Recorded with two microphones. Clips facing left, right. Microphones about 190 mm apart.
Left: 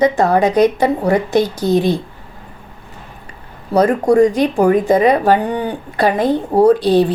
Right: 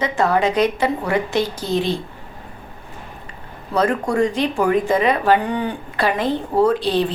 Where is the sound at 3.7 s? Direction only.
40° left (ahead or behind).